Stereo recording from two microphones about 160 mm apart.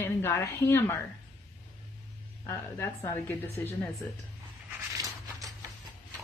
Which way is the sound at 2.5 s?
15° left (ahead or behind).